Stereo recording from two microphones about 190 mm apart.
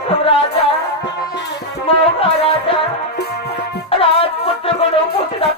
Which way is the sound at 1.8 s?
30° left (ahead or behind).